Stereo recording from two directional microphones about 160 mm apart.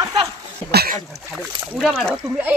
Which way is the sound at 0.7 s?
70° right (ahead or behind).